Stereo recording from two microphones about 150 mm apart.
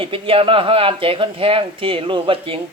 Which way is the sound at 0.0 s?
35° right (ahead or behind).